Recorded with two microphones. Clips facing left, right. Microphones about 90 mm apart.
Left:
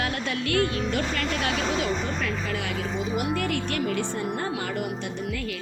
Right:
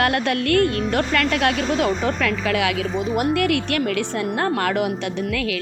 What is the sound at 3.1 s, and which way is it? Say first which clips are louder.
A woman's voice: right 8 dB; 65° right (ahead or behind).